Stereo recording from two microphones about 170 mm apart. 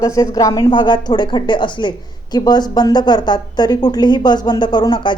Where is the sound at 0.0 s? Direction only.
20° left (ahead or behind).